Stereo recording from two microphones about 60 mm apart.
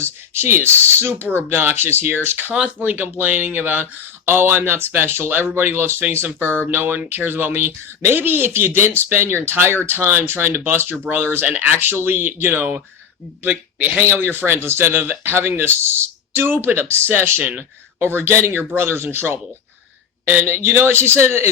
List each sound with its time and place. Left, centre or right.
0.0 s speech: right
2.6 s speech: right
17.4 s speech: right
18.0 s speech: right
20.5 s speech: right